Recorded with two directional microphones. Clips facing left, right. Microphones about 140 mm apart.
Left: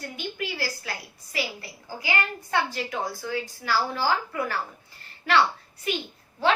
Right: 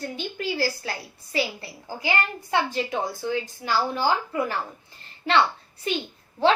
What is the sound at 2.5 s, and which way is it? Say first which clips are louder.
A woman's voice: right 3 dB; 20° right (ahead or behind).